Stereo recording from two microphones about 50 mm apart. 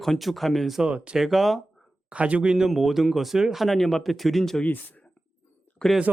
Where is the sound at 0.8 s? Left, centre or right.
Right.